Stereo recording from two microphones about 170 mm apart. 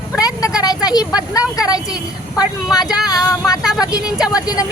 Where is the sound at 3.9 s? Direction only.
5° right (ahead or behind).